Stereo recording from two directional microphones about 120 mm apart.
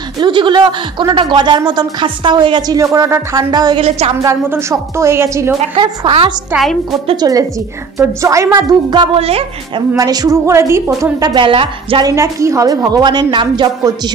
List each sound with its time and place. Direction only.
0.2 s a woman's voice: 40° right (ahead or behind); by 3.4 s 25° right (ahead or behind)
3.5 s a woman's voice: 35° right (ahead or behind)
4.2 s a woman's voice: 25° right (ahead or behind)
5.8 s a woman's voice: 45° right (ahead or behind)
6.5 s a woman's voice: centre (ahead or behind)
7.2 s a woman's voice: 30° right (ahead or behind)
11.3 s a woman's voice: 45° right (ahead or behind)
12.2 s a woman's voice: 25° right (ahead or behind)